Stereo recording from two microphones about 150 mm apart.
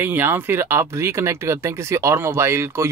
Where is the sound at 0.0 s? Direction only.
15° right (ahead or behind).